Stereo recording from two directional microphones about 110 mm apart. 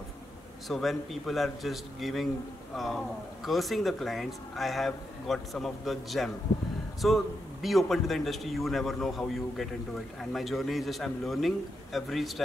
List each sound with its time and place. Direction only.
0.7 s a man's voice: centre (ahead or behind)
10.3 s a man's voice: centre (ahead or behind)